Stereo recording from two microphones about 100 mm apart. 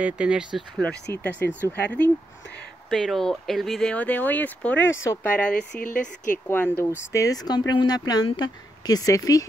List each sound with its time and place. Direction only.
0.0 s speech: 10° right (ahead or behind)
0.6 s speech: 10° left (ahead or behind)
1.1 s speech: 20° left (ahead or behind)
2.9 s speech: 5° left (ahead or behind)
3.9 s speech: 15° left (ahead or behind)
5.0 s speech: 30° left (ahead or behind)
5.3 s speech: 10° left (ahead or behind)
7.2 s speech: 40° left (ahead or behind)